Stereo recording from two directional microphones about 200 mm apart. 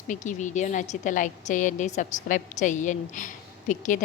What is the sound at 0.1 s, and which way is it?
A woman's voice, 40° left (ahead or behind).